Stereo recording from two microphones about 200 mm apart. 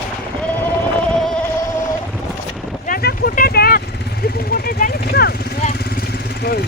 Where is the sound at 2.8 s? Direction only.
45° left (ahead or behind).